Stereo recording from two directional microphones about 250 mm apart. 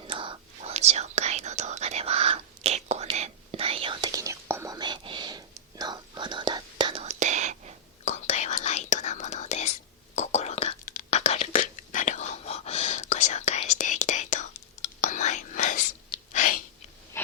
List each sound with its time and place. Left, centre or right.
0.0 s whispering: centre
8.0 s whispering: left